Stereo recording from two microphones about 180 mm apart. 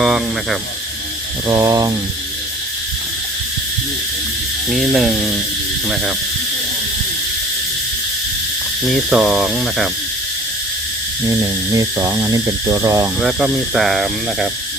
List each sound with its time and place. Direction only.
0.0 s speech: centre (ahead or behind)
1.5 s speech: 20° right (ahead or behind)
4.7 s speech: centre (ahead or behind)
8.9 s speech: 5° right (ahead or behind)
11.3 s speech: 20° right (ahead or behind)
13.1 s speech: 5° right (ahead or behind)